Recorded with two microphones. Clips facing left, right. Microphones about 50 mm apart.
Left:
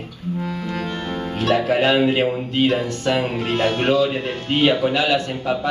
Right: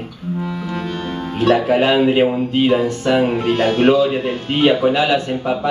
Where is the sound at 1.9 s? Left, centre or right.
Centre.